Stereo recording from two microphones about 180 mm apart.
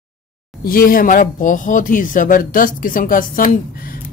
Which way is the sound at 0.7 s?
55° left (ahead or behind).